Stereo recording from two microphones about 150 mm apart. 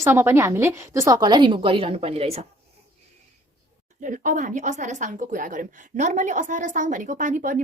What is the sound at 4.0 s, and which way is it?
A woman's voice, 60° right (ahead or behind).